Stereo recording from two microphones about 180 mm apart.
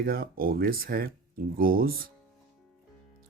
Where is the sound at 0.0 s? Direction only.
55° right (ahead or behind).